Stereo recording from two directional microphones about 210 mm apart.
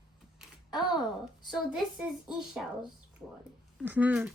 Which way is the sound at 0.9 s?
Centre (ahead or behind).